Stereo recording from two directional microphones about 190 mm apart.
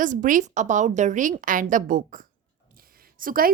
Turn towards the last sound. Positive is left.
turn(degrees=-50)  # may be behind; listen again after turning